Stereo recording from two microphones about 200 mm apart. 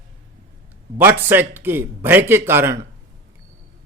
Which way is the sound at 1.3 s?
10° right (ahead or behind).